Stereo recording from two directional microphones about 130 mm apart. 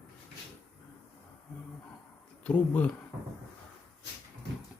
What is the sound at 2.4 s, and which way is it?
Speech, 10° left (ahead or behind).